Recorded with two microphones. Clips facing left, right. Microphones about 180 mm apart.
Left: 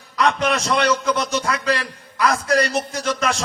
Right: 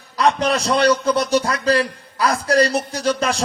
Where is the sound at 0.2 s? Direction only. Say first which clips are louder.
Right 2 dB; 35° right (ahead or behind).